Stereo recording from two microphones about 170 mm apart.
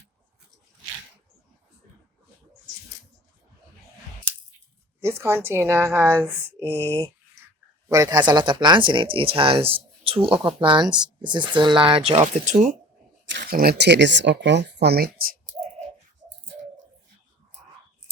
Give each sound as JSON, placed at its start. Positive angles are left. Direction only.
{"t": 4.9, "sound": "speech", "side_deg": -15}
{"t": 6.7, "sound": "speech", "side_deg": 10}
{"t": 7.9, "sound": "speech", "side_deg": -20}
{"t": 13.3, "sound": "speech", "side_deg": -60}